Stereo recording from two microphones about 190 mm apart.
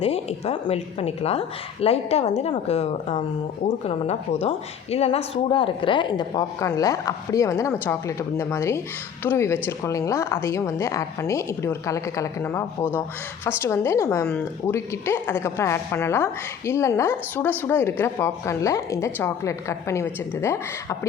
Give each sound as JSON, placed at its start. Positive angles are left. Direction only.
{"t": 0.0, "sound": "a woman's voice", "side_deg": 30}